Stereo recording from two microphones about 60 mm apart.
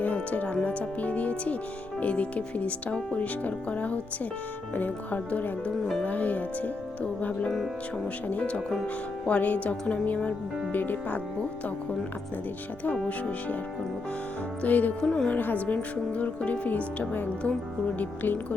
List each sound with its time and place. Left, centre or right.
0.0 s speech: left
13.1 s speech: left
14.6 s speech: left
15.0 s speech: centre